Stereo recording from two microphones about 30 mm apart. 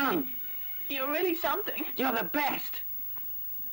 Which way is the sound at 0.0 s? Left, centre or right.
Centre.